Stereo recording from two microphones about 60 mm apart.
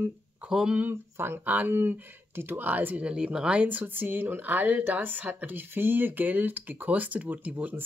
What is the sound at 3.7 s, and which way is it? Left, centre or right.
Speech, right.